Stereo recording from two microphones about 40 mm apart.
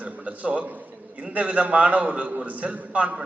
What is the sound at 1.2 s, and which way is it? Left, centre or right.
A man's voice, right.